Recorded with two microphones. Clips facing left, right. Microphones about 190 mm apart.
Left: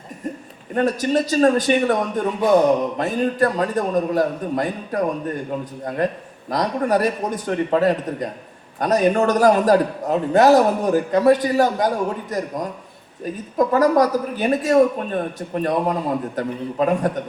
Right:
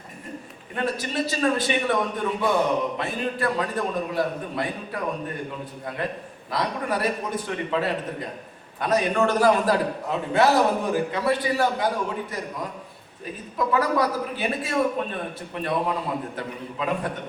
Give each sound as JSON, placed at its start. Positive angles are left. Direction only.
{"t": 0.7, "sound": "a man's voice", "side_deg": 45}